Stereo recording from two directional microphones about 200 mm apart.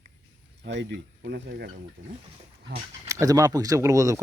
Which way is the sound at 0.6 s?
60° right (ahead or behind).